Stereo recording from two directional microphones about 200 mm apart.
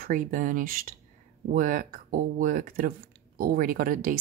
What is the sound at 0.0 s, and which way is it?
Speech, 40° right (ahead or behind).